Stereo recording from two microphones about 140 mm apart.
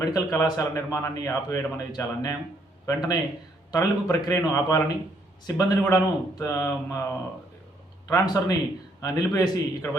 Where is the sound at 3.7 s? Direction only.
25° left (ahead or behind).